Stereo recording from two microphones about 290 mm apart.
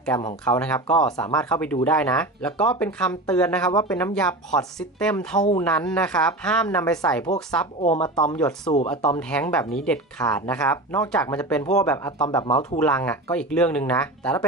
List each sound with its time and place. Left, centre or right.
0.0 s speech: centre
7.8 s speech: centre
8.4 s speech: centre